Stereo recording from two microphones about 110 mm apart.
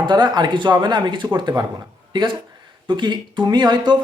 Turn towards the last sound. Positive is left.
turn(degrees=-40)  # may be behind; listen again after turning